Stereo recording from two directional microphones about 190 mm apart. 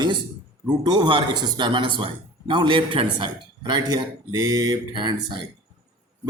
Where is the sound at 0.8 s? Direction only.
25° right (ahead or behind).